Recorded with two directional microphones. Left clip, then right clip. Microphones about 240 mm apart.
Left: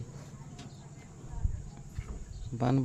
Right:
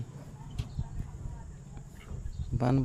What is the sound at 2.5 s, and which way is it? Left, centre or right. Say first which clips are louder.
Speech: right 1 dB; centre.